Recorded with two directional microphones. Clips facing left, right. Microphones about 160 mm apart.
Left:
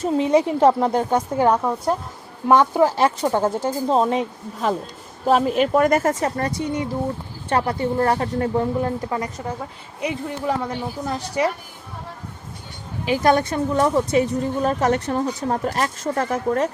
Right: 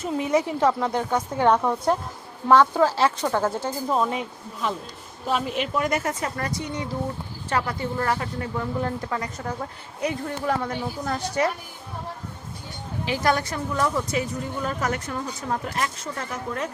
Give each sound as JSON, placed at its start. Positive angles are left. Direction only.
{"t": 0.2, "sound": "a woman's voice", "side_deg": 20}
{"t": 1.4, "sound": "a woman's voice", "side_deg": 10}
{"t": 3.8, "sound": "a woman's voice", "side_deg": 35}
{"t": 7.5, "sound": "a woman's voice", "side_deg": 30}
{"t": 8.8, "sound": "a woman's voice", "side_deg": 20}
{"t": 9.4, "sound": "a woman's voice", "side_deg": 10}
{"t": 13.1, "sound": "a woman's voice", "side_deg": 25}